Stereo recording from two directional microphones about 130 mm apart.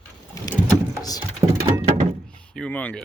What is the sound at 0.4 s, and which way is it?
Vehicle, 25° left (ahead or behind).